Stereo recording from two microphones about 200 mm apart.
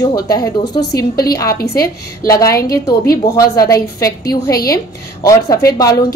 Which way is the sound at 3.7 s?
15° left (ahead or behind).